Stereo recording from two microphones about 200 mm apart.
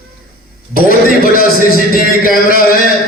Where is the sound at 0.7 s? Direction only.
45° left (ahead or behind).